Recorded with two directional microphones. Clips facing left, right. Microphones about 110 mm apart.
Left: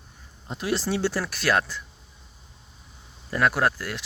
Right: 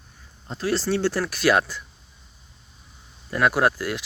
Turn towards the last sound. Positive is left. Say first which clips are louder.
# right 3 dB
turn(degrees=-5)  # may be behind; listen again after turning